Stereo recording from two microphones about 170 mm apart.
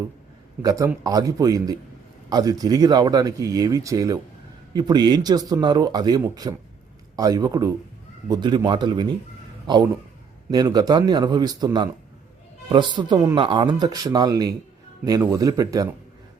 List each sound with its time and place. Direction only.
0.6 s speech: 20° right (ahead or behind)